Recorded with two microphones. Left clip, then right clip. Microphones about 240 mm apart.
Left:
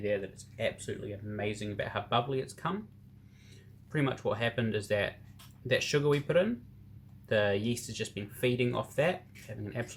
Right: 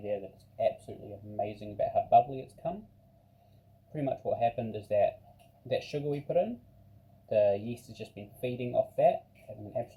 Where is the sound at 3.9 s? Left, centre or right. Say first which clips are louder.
Even; left.